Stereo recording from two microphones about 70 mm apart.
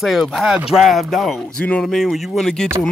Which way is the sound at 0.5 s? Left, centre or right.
Centre.